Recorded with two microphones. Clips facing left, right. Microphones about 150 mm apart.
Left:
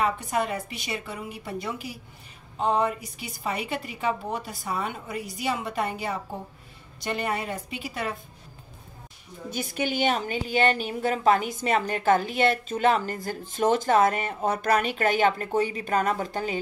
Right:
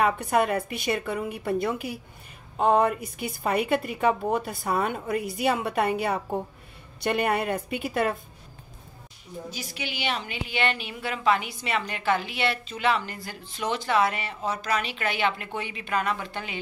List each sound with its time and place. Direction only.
0.0 s a woman's voice: 60° right (ahead or behind)
9.5 s a woman's voice: 55° left (ahead or behind)